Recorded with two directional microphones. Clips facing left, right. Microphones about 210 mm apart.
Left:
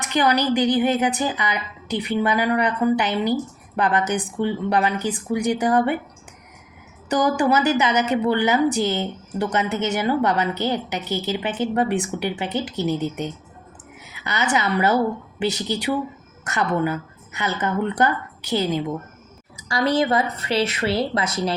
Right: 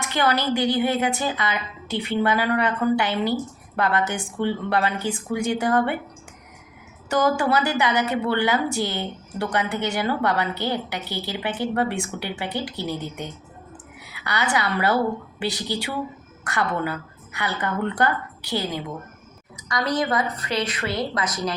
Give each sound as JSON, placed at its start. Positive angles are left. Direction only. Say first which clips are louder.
{"t": 0.0, "sound": "a woman's voice", "louder": "left 3 dB", "side_deg": 15}
{"t": 7.1, "sound": "a woman's voice", "louder": "left 2 dB", "side_deg": 20}
{"t": 14.0, "sound": "a woman's voice", "louder": "left 1 dB", "side_deg": 20}